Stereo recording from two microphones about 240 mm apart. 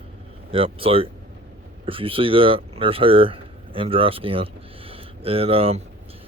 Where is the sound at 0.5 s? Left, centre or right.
Right.